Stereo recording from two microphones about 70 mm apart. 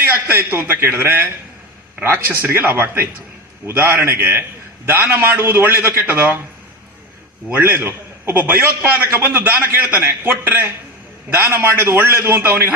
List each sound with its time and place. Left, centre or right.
0.3 s a man's voice: right
7.5 s a man's voice: right